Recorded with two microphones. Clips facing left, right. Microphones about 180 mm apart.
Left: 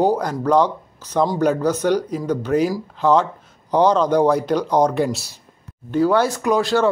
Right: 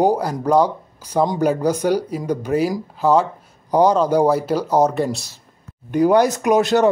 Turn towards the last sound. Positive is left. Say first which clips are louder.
# right 2 dB
turn(degrees=-20)  # may be behind; listen again after turning